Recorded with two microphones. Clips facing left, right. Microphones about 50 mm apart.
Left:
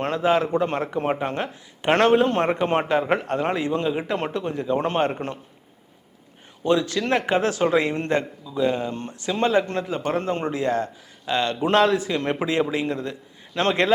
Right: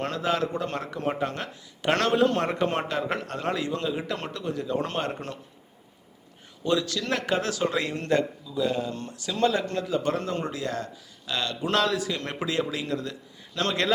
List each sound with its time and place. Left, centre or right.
0.0 s speech: left
6.7 s speech: left